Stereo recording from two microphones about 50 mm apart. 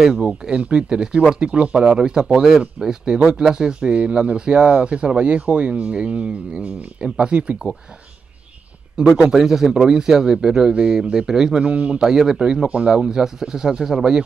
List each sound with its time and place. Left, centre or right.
0.2 s speech: centre
9.0 s speech: centre
9.3 s speech: centre
11.6 s speech: right
12.0 s speech: centre
12.4 s speech: right